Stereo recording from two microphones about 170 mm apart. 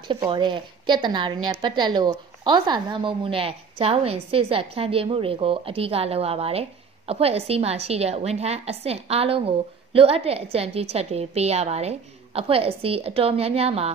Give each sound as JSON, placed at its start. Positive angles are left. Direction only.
{"t": 0.1, "sound": "a woman's voice", "side_deg": -30}